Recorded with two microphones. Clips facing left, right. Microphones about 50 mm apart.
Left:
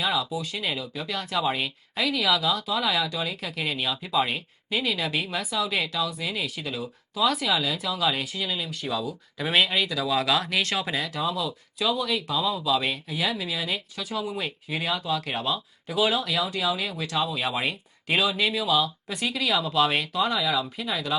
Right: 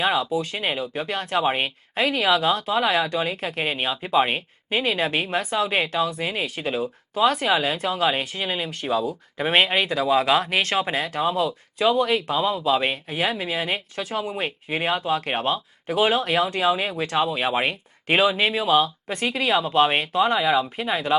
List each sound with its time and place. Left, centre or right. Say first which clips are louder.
0.0 s speech: right 5 dB; right